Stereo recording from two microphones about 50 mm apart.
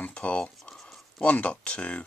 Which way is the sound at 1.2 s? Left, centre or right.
Left.